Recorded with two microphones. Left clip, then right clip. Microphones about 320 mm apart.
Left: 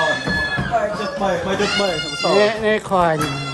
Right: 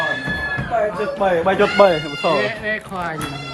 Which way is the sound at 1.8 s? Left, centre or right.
Right.